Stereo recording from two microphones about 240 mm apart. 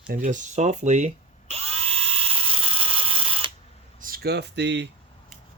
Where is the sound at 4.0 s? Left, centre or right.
Right.